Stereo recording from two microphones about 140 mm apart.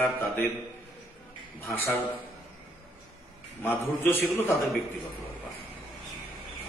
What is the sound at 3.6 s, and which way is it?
Speech, 15° left (ahead or behind).